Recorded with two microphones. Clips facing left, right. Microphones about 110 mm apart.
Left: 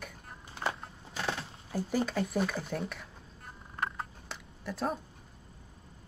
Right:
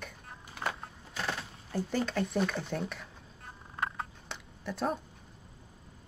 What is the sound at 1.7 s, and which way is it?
Speech, 5° left (ahead or behind).